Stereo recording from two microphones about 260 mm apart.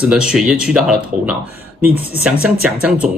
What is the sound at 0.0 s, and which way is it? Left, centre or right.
Speech, centre.